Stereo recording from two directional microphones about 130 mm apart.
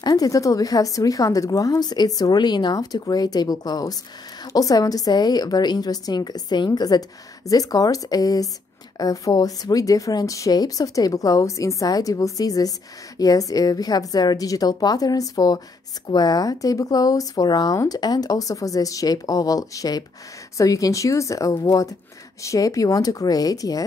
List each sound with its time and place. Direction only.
0.0 s a woman's voice: 30° left (ahead or behind)